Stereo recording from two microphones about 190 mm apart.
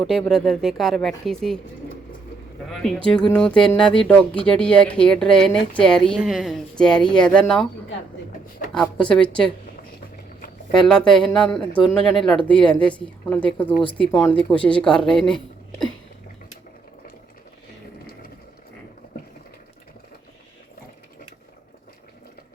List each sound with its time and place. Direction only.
0.0 s speech: 5° left (ahead or behind)
2.6 s speech: centre (ahead or behind)
8.7 s speech: 5° left (ahead or behind)
10.8 s a woman's voice: 5° left (ahead or behind)